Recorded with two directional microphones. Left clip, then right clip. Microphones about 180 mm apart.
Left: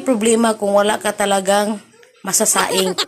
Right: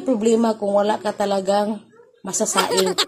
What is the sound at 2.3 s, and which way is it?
Speech, centre (ahead or behind).